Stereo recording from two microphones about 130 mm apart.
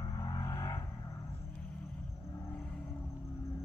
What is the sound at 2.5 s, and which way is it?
Vehicle, 10° left (ahead or behind).